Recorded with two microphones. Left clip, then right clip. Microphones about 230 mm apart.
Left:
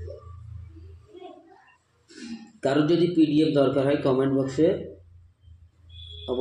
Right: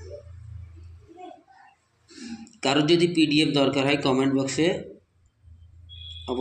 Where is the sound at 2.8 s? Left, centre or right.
Centre.